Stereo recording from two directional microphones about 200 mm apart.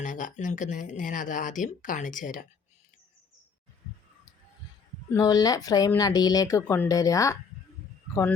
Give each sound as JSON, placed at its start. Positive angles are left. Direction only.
{"t": 0.0, "sound": "speech", "side_deg": 40}
{"t": 5.1, "sound": "speech", "side_deg": 20}